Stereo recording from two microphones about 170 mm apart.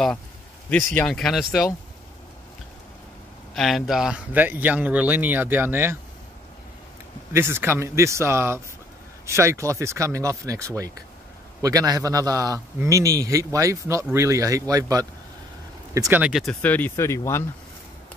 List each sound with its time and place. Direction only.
0.9 s speech: 5° left (ahead or behind)
3.5 s speech: centre (ahead or behind)
7.3 s a man's voice: 15° right (ahead or behind)
16.2 s speech: 5° right (ahead or behind)
16.6 s speech: 10° left (ahead or behind)